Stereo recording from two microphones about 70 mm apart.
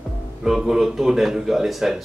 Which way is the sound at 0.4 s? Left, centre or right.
Centre.